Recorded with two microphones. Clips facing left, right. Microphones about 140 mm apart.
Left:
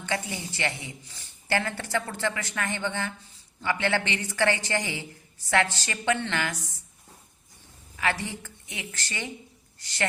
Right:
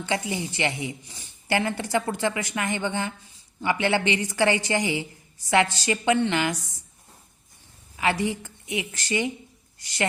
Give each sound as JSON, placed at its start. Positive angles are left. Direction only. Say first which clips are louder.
{"t": 0.0, "sound": "speech", "louder": "right 4 dB", "side_deg": -15}
{"t": 7.9, "sound": "a woman's voice", "louder": "right 5 dB", "side_deg": -15}